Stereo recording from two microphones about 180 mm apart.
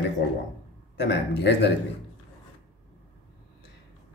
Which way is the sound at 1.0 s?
70° left (ahead or behind).